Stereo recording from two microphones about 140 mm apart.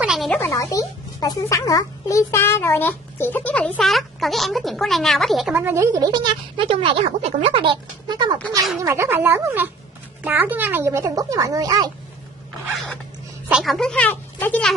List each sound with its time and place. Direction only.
0.0 s music: 5° right (ahead or behind)
0.3 s speech: 20° left (ahead or behind); by 5.5 s centre (ahead or behind)
5.5 s speech: 15° right (ahead or behind)
6.1 s speech: 35° right (ahead or behind)
8.8 s speech: 20° right (ahead or behind)
13.5 s speech: centre (ahead or behind)